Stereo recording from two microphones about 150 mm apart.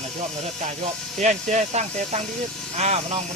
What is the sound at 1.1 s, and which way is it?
Speech, 50° right (ahead or behind).